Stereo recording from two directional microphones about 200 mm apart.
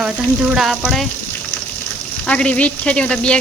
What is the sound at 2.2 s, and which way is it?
Speech, 5° left (ahead or behind).